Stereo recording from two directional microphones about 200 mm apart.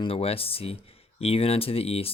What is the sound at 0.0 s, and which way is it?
Speech, 30° left (ahead or behind).